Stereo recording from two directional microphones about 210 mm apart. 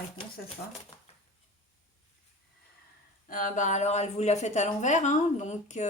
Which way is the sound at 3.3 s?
40° left (ahead or behind).